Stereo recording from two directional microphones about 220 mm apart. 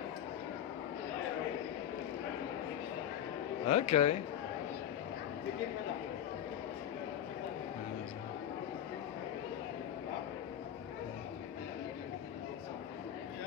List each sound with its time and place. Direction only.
3.6 s a man's voice: 30° left (ahead or behind)